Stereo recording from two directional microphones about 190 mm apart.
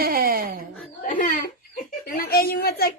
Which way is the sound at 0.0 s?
50° right (ahead or behind).